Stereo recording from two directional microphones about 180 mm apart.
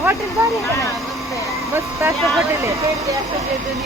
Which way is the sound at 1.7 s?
15° right (ahead or behind).